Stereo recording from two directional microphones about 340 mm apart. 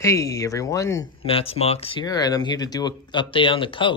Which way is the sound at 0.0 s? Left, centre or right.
Centre.